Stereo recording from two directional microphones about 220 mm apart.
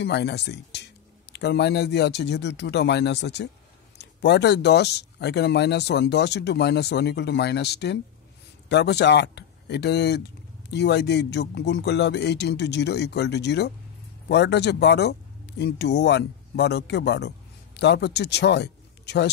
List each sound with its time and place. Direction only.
0.0 s speech: 50° left (ahead or behind)